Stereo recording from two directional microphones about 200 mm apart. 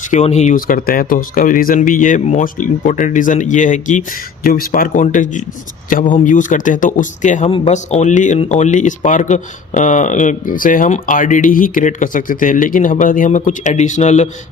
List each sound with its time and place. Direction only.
0.1 s speech: 35° left (ahead or behind)